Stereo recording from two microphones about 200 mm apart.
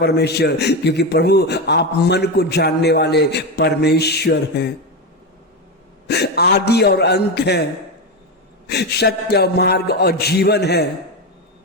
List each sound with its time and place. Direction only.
0.0 s a man's voice: 55° left (ahead or behind)
6.1 s a man's voice: 55° left (ahead or behind)
8.7 s a man's voice: 55° left (ahead or behind)